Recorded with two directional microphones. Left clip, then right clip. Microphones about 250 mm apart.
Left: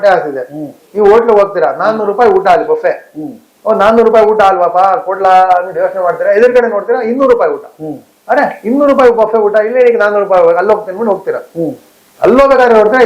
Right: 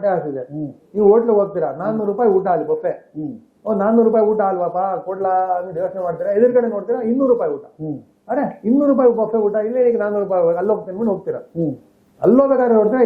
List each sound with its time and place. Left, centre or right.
0.0 s a man's voice: centre